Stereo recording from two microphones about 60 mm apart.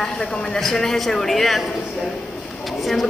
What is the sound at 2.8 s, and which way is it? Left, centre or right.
Speech, centre.